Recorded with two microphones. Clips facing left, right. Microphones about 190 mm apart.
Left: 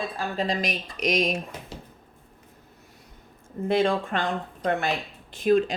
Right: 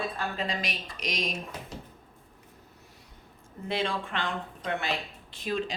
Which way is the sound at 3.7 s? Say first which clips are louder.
Left 8 dB; 45° left (ahead or behind).